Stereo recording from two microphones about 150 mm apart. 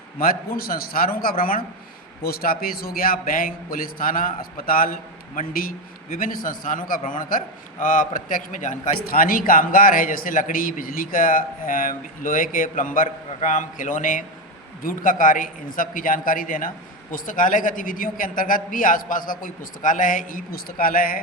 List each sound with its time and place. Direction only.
0.2 s a man's voice: 75° left (ahead or behind)